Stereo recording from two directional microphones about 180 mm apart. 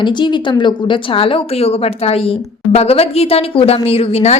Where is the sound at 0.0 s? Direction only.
25° left (ahead or behind).